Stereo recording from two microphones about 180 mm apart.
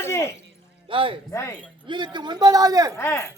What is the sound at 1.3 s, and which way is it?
Speech, 15° left (ahead or behind).